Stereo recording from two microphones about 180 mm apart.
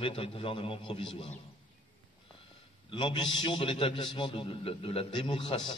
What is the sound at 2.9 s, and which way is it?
A man's voice, 25° left (ahead or behind).